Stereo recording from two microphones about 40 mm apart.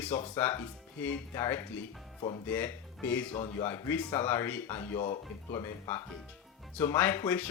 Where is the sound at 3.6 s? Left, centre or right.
Left.